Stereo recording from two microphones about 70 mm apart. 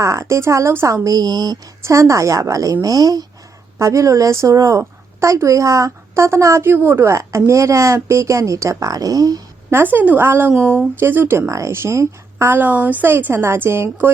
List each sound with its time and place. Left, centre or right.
0.0 s speech: right
1.0 s a woman's voice: right
1.8 s speech: right
2.8 s speech: right
3.8 s speech: right
9.6 s a woman's voice: right
12.5 s a woman's voice: right